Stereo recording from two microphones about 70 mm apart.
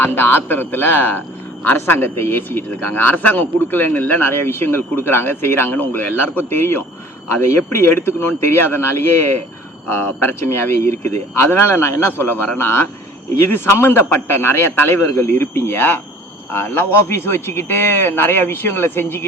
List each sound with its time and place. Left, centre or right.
0.0 s speech: left
9.8 s speech: left